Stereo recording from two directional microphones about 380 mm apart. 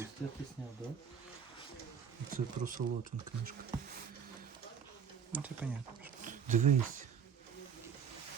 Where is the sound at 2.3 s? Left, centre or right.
Right.